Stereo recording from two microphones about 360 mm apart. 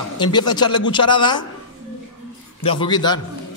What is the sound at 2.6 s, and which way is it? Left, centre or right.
Speech, centre.